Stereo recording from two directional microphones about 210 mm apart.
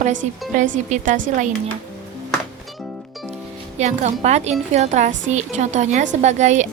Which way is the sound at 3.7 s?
35° right (ahead or behind).